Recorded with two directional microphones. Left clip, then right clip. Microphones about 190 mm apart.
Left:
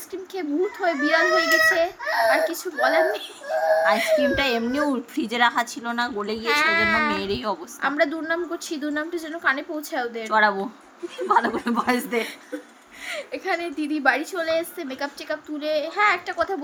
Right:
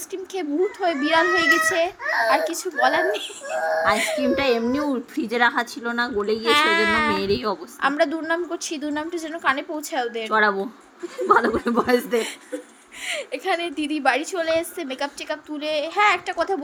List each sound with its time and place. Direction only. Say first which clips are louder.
0.1 s a woman's voice: right 1 dB; 20° right (ahead or behind)
6.4 s a woman's voice: right 1 dB; 20° right (ahead or behind)
10.3 s a woman's voice: even; 5° right (ahead or behind)
13.1 s a woman's voice: right 2 dB; 20° right (ahead or behind)